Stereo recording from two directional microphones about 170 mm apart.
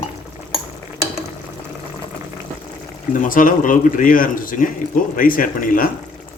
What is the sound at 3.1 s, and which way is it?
A man's voice, 50° left (ahead or behind).